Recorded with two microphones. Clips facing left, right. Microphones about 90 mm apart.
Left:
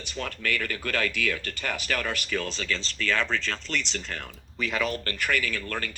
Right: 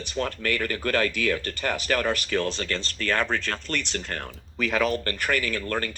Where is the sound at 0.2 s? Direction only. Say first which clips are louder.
Right 4 dB; 40° right (ahead or behind).